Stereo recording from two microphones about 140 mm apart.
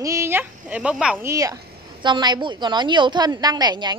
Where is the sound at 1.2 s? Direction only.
25° right (ahead or behind).